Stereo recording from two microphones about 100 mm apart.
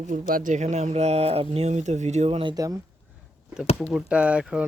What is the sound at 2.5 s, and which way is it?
Speech, 35° right (ahead or behind).